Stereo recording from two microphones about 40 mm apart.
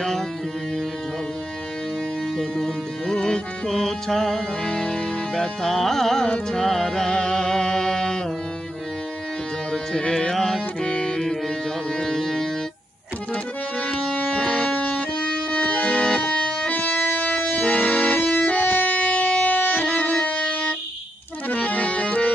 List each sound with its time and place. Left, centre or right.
0.0 s music: centre
2.3 s music: centre
9.7 s music: left
10.3 s music: centre
10.8 s music: left
13.3 s accordion: left
13.9 s music: centre
16.6 s music: left
17.2 s accordion: left
19.8 s music: left
21.5 s accordion: left